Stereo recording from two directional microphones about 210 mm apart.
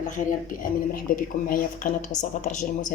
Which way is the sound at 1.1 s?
45° left (ahead or behind).